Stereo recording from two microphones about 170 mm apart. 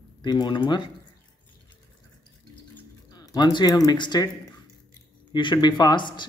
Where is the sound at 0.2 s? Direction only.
25° left (ahead or behind).